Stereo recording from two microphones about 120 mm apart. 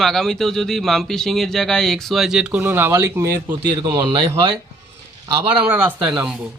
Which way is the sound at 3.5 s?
35° right (ahead or behind).